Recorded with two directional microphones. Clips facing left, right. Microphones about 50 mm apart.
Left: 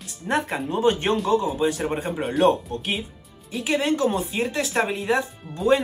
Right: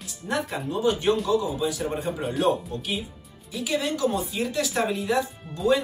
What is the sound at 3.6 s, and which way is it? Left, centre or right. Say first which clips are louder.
Speech: left 3 dB; left.